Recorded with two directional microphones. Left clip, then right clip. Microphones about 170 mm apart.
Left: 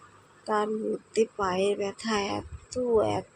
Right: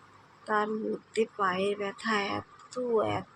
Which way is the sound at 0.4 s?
25° left (ahead or behind).